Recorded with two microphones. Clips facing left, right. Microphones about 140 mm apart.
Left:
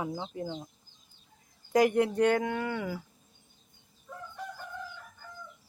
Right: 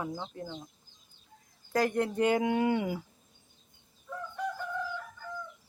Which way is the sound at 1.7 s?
10° left (ahead or behind).